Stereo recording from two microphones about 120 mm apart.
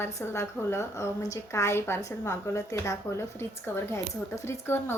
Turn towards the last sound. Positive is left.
turn(degrees=20)  # may be behind; listen again after turning